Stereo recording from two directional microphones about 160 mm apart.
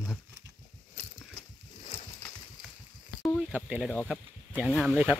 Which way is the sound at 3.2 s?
5° left (ahead or behind).